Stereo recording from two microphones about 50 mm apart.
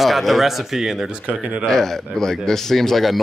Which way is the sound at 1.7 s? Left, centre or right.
Centre.